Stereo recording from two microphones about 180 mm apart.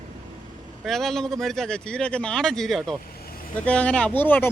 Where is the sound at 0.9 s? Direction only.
Centre (ahead or behind).